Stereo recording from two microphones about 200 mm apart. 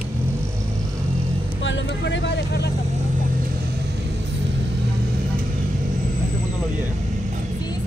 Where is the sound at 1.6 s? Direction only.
65° left (ahead or behind).